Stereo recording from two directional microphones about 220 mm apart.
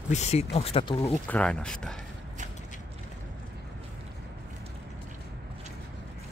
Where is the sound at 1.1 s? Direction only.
5° left (ahead or behind).